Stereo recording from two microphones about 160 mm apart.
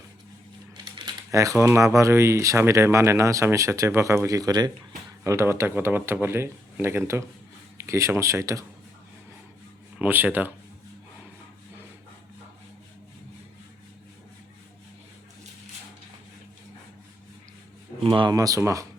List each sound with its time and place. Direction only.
0.9 s typing: 30° right (ahead or behind)
1.6 s speech: 15° right (ahead or behind)
10.0 s speech: 10° right (ahead or behind)
18.0 s speech: 30° right (ahead or behind)